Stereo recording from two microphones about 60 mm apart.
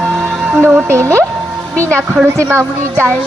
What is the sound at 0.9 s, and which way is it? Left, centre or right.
Speech, right.